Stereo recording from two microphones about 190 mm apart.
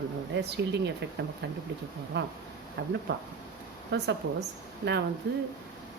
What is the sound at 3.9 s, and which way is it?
Speech, 60° right (ahead or behind).